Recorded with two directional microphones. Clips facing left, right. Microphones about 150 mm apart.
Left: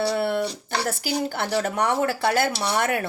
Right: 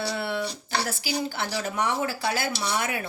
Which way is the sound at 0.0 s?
50° left (ahead or behind).